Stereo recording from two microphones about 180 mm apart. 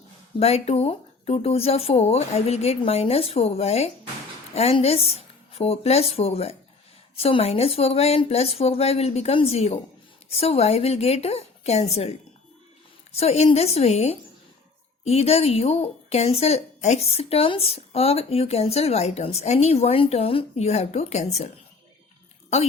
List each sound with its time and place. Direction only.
0.3 s speech: 35° left (ahead or behind)
13.1 s speech: 35° left (ahead or behind)